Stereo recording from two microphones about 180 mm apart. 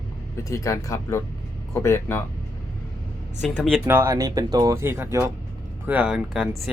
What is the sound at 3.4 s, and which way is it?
Speech, centre (ahead or behind).